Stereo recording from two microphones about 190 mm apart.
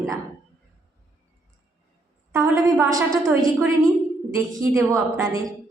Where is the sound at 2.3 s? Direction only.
15° right (ahead or behind).